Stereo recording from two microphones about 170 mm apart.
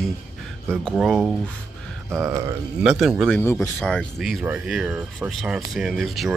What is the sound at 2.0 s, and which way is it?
Speech, 15° right (ahead or behind).